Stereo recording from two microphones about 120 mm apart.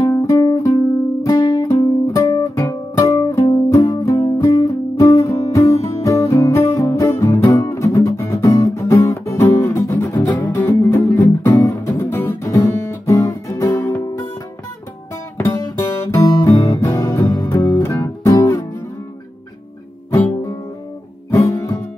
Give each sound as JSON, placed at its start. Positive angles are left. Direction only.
{"t": 0.0, "sound": "music", "side_deg": 25}
{"t": 15.3, "sound": "guitar", "side_deg": 25}
{"t": 16.8, "sound": "music", "side_deg": 25}
{"t": 20.1, "sound": "guitar", "side_deg": 20}
{"t": 21.3, "sound": "music", "side_deg": 25}